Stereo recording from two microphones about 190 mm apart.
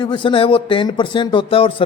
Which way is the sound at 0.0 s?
25° left (ahead or behind).